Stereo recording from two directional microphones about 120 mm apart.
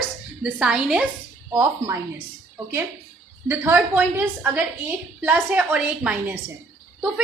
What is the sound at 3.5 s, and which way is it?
A woman's voice, 15° right (ahead or behind).